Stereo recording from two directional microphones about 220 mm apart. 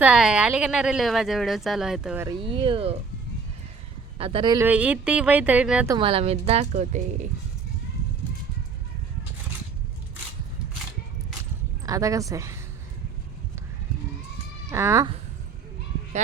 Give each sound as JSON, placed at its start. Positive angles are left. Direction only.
{"t": 0.0, "sound": "speech", "side_deg": -5}
{"t": 2.2, "sound": "a woman's voice", "side_deg": -25}
{"t": 4.2, "sound": "a woman's voice", "side_deg": -25}
{"t": 4.6, "sound": "speech", "side_deg": -5}
{"t": 5.9, "sound": "a woman's voice", "side_deg": -25}
{"t": 11.9, "sound": "speech", "side_deg": -15}
{"t": 14.7, "sound": "speech", "side_deg": -10}